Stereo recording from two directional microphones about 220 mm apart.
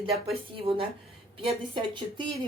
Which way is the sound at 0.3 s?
25° right (ahead or behind).